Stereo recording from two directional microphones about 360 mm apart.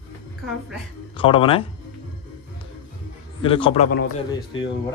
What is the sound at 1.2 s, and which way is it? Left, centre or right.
Speech, centre.